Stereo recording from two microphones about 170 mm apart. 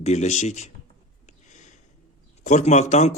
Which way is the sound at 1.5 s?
45° left (ahead or behind).